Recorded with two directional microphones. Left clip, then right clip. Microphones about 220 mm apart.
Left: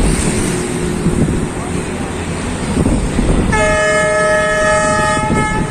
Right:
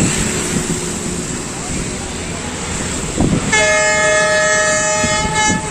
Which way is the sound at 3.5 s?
15° right (ahead or behind).